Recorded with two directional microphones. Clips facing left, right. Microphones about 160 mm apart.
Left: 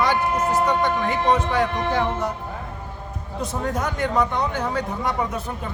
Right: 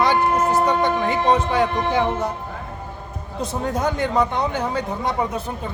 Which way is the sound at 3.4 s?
30° right (ahead or behind).